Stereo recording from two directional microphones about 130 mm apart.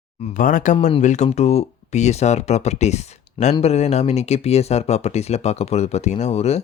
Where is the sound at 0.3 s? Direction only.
85° left.